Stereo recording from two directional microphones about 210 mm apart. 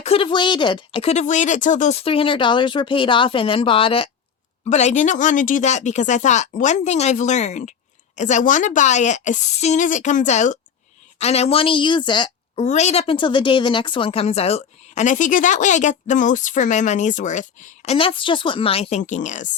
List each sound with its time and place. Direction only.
0.0 s speech: 25° left (ahead or behind)
12.6 s speech: 35° left (ahead or behind)